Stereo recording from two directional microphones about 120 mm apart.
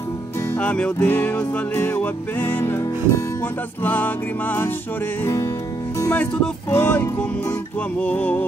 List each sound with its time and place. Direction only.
0.6 s music: 10° left (ahead or behind)